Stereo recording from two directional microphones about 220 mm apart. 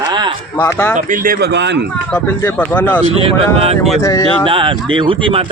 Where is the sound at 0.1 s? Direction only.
20° right (ahead or behind).